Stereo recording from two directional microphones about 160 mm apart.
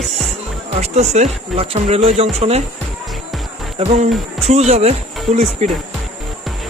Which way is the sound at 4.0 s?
45° right (ahead or behind).